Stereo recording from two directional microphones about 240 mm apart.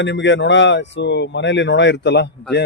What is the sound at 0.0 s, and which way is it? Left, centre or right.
Speech, left.